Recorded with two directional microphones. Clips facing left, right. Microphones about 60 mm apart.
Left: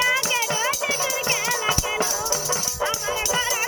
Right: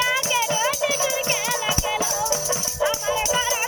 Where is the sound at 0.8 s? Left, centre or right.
Left.